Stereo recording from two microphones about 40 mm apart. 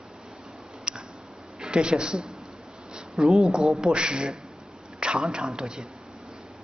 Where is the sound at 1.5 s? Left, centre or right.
Right.